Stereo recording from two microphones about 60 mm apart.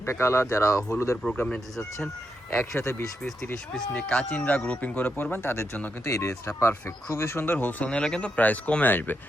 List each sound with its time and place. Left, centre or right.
0.0 s speech: left
2.5 s speech: left
3.9 s speech: centre; by 5.6 s left
6.1 s speech: left
6.6 s speech: left